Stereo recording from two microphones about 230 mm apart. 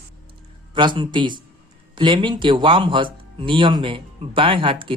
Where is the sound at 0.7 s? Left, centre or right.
Right.